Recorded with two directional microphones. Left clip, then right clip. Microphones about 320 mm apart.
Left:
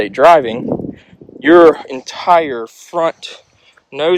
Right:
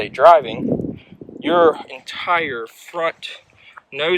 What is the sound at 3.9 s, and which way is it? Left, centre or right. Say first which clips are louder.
Speech: left 5 dB; centre.